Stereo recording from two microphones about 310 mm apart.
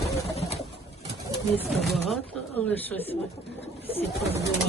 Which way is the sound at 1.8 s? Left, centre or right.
Centre.